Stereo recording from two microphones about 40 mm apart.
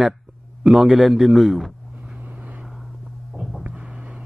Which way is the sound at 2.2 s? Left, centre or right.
Right.